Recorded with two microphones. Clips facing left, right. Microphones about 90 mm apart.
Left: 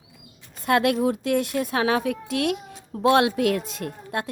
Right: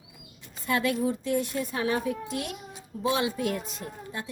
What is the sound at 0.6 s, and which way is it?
A woman's voice, 65° left (ahead or behind).